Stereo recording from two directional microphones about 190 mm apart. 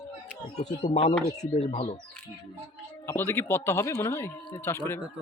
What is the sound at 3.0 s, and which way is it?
A man's voice, 15° left (ahead or behind).